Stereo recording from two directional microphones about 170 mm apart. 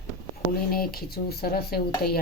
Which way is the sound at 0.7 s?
65° left (ahead or behind).